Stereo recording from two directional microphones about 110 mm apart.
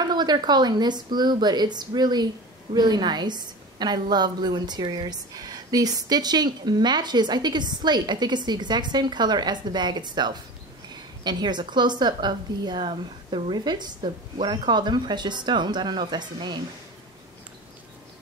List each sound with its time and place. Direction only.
0.0 s a woman's voice: 40° right (ahead or behind)